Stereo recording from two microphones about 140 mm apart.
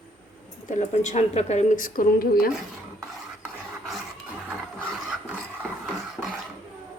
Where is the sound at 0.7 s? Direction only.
55° left (ahead or behind); by 2.5 s 90° left.